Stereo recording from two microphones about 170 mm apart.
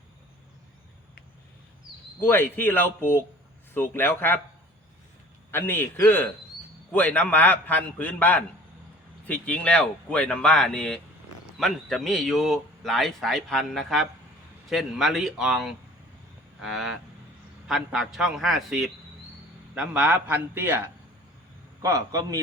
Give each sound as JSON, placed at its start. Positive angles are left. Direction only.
{"t": 2.2, "sound": "speech", "side_deg": 15}
{"t": 5.5, "sound": "a man's voice", "side_deg": 15}